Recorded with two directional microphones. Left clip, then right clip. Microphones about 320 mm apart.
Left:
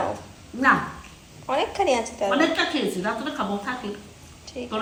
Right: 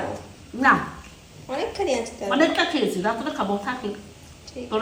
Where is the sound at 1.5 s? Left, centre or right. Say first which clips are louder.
Left 3 dB; left.